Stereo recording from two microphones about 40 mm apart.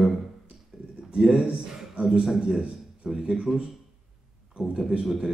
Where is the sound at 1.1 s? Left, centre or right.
Centre.